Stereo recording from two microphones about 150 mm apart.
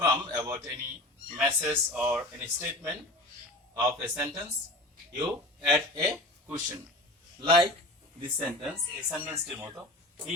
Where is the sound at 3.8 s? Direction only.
15° right (ahead or behind).